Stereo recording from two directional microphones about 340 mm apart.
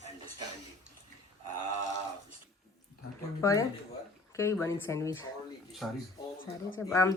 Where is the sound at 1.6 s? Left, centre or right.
Right.